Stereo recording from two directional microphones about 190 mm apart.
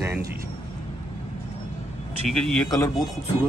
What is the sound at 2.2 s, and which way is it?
Speech, centre (ahead or behind).